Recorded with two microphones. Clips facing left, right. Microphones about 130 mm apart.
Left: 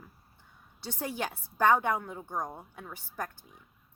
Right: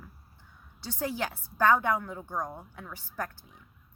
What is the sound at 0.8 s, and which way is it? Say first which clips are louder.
Speech: right 2 dB; 25° left (ahead or behind).